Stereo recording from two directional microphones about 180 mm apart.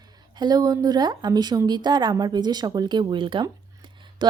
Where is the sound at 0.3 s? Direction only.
20° right (ahead or behind).